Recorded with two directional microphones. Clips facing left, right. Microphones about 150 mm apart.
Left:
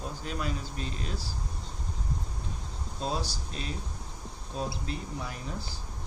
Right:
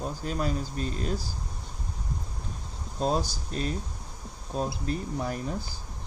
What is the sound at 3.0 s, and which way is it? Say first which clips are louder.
Speech: right 6 dB; 45° right (ahead or behind).